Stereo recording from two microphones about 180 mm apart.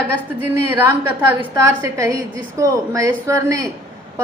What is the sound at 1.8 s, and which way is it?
A woman's voice, 15° right (ahead or behind).